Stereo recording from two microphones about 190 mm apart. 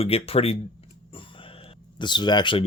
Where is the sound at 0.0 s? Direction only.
30° left (ahead or behind).